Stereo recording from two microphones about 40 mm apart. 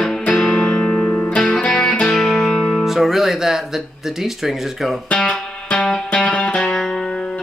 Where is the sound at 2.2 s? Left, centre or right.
Centre.